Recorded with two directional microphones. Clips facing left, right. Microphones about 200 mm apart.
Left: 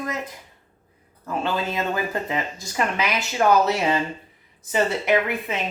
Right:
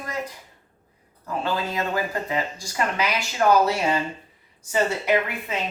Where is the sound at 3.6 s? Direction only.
20° left (ahead or behind).